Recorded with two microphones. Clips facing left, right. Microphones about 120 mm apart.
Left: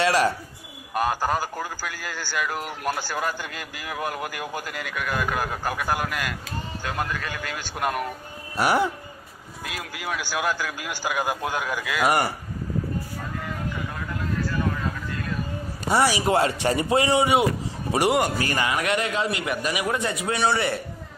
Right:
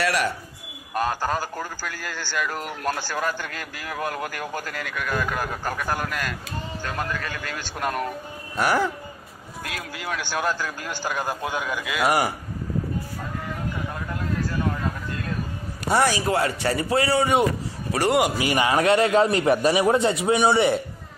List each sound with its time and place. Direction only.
0.0 s speech: 30° left (ahead or behind)
0.9 s a man's voice: 15° left (ahead or behind)
9.9 s a man's voice: 5° left (ahead or behind)
11.8 s a man's voice: centre (ahead or behind)
15.9 s a man's voice: 5° left (ahead or behind)
16.2 s speech: 25° left (ahead or behind)
18.4 s a man's voice: 15° right (ahead or behind)
18.7 s a man's voice: 35° right (ahead or behind)